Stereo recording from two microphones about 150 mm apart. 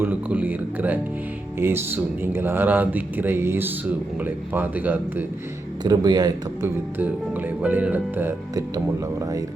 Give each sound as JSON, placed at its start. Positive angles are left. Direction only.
{"t": 0.0, "sound": "speech", "side_deg": -10}
{"t": 5.8, "sound": "a man's voice", "side_deg": -25}
{"t": 7.6, "sound": "speech", "side_deg": -10}